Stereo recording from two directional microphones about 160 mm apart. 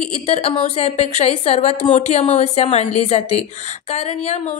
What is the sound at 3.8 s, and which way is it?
Speech, 40° left (ahead or behind).